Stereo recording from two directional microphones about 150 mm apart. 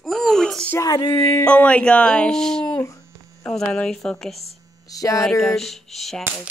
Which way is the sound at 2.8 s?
20° left (ahead or behind).